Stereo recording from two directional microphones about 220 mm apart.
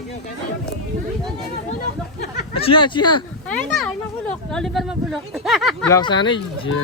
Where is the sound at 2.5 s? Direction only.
25° left (ahead or behind).